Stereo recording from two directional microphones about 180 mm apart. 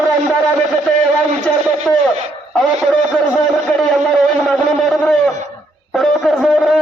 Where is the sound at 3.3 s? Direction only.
Centre (ahead or behind).